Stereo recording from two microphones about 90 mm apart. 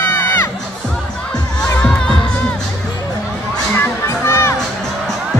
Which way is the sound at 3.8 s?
30° left (ahead or behind).